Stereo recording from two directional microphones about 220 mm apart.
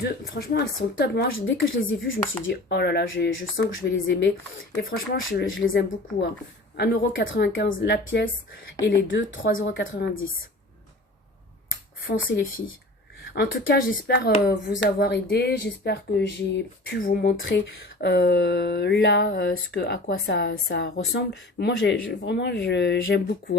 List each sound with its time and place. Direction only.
0.0 s speech: 45° left (ahead or behind)
4.7 s speech: 45° left (ahead or behind)
6.7 s speech: 50° left (ahead or behind)
9.9 s a woman's voice: 40° left (ahead or behind)
12.3 s speech: 55° left (ahead or behind)
17.3 s speech: 60° left (ahead or behind)
18.0 s speech: 50° left (ahead or behind)